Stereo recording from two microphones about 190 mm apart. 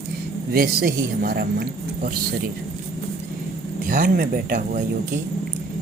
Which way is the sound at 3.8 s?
45° right (ahead or behind).